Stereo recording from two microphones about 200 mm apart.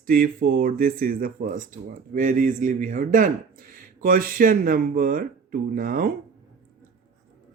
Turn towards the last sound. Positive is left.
turn(degrees=-45)  # may be behind; listen again after turning